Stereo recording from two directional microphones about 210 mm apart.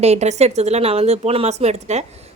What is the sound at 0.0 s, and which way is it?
Speech, 30° right (ahead or behind).